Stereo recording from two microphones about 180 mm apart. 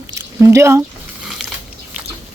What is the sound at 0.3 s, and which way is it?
Speech, 15° right (ahead or behind).